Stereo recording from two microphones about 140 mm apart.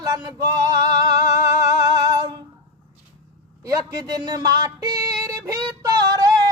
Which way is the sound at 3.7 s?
25° right (ahead or behind).